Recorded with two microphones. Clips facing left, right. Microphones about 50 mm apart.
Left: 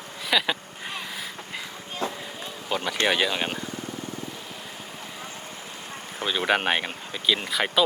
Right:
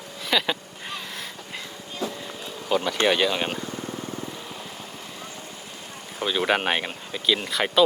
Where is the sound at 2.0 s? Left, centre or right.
Left.